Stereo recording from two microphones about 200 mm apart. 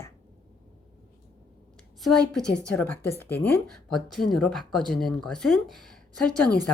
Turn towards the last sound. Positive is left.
turn(degrees=5)  # may be behind; listen again after turning